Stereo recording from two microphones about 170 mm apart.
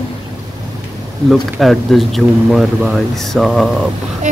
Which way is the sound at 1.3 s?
Centre (ahead or behind).